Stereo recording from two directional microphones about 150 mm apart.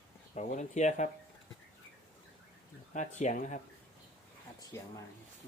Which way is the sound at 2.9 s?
55° left (ahead or behind).